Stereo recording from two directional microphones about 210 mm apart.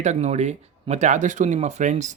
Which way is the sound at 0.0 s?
35° right (ahead or behind).